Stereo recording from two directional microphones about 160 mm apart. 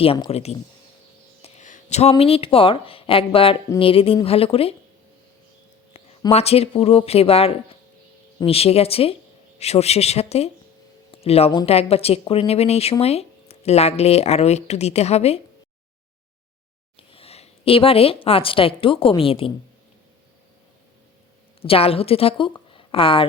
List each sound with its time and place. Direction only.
0.0 s speech: 35° left (ahead or behind)
6.3 s speech: 40° left (ahead or behind)
11.1 s a sound: 40° left (ahead or behind)
11.6 s speech: 40° left (ahead or behind)
17.0 s a woman's voice: 35° left (ahead or behind)
21.7 s a woman's voice: 35° left (ahead or behind)